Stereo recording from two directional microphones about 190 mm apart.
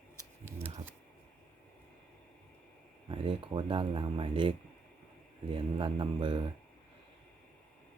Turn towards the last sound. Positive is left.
turn(degrees=-25)  # may be behind; listen again after turning